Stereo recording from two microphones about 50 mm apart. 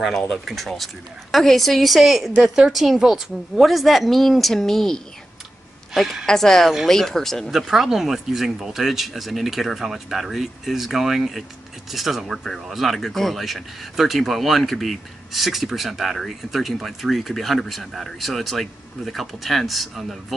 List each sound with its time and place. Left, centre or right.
0.0 s speech: centre
2.3 s speech: centre
6.2 s speech: centre
7.5 s speech: centre